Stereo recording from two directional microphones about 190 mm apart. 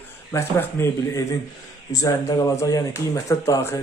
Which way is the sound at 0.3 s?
15° left (ahead or behind).